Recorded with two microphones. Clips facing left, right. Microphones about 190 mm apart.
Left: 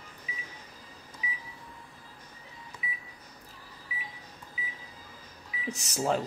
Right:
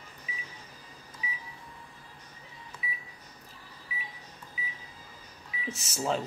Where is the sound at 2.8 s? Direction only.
15° left (ahead or behind).